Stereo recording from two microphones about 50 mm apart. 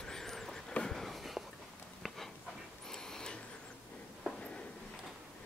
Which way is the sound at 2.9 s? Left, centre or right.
Centre.